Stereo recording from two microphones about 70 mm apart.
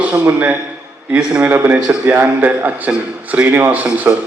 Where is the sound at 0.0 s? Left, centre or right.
Right.